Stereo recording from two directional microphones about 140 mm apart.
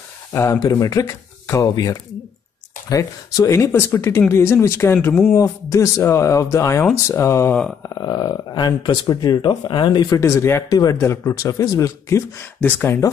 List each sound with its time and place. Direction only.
0.3 s speech: 20° left (ahead or behind)